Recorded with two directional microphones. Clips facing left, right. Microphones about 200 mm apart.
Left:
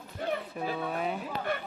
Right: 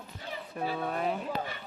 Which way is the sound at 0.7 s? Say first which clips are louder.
Right 2 dB; 5° left (ahead or behind).